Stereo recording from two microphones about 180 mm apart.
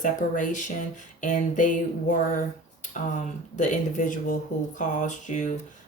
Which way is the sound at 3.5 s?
45° left (ahead or behind).